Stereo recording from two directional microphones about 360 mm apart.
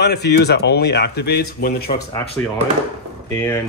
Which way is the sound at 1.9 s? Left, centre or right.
Centre.